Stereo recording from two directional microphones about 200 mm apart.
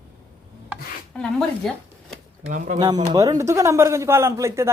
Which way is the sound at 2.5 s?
40° right (ahead or behind).